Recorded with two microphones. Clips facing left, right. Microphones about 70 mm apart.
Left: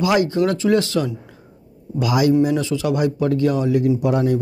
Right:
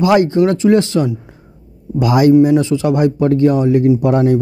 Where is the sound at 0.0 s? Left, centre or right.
Right.